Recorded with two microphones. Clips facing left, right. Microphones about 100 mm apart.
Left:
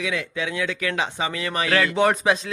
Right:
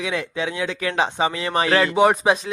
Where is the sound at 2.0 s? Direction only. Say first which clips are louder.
Right 3 dB; 15° right (ahead or behind).